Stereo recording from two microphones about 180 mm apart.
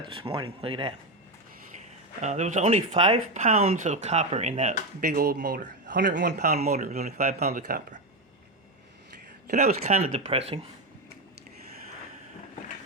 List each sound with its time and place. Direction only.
0.0 s speech: 30° right (ahead or behind)
2.2 s speech: 40° right (ahead or behind)
5.0 s speech: 55° right (ahead or behind)
6.1 s a man's voice: 75° right (ahead or behind)
6.6 s speech: 40° right (ahead or behind)
9.8 s speech: 35° right (ahead or behind)